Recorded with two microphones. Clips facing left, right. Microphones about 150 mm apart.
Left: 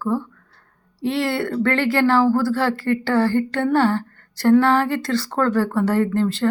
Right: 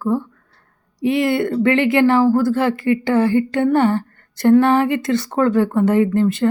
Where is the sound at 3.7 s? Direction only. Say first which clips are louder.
Right 2 dB; 20° right (ahead or behind).